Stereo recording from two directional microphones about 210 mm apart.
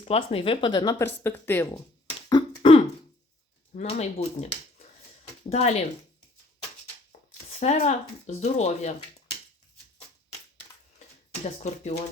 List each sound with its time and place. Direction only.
0.0 s speech: 30° left (ahead or behind); by 1.6 s 10° left (ahead or behind)
1.7 s a sound: 30° left (ahead or behind)
3.8 s speech: 30° left (ahead or behind)
5.5 s speech: 30° left (ahead or behind)
7.5 s speech: 35° left (ahead or behind)
11.4 s speech: 30° left (ahead or behind)